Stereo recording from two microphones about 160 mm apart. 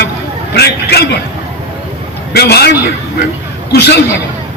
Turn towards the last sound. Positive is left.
turn(degrees=90)